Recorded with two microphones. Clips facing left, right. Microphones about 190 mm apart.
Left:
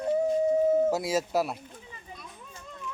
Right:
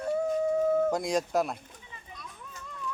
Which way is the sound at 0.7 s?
20° left (ahead or behind).